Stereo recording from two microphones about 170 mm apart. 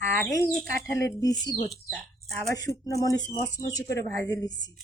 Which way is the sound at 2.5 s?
20° left (ahead or behind).